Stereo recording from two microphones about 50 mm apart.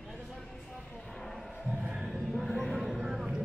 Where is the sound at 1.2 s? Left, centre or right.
Centre.